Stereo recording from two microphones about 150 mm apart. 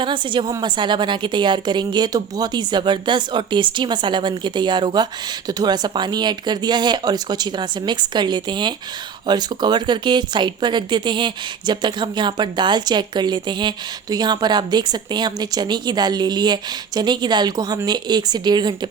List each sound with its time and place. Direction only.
0.0 s a woman's voice: 35° right (ahead or behind)